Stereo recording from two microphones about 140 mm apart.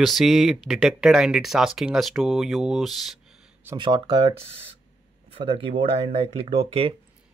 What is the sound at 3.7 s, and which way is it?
Speech, 35° right (ahead or behind).